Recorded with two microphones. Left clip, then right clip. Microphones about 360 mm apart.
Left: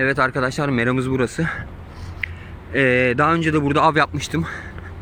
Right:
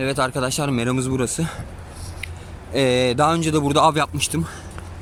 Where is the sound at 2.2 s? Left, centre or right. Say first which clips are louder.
Left 7 dB; centre.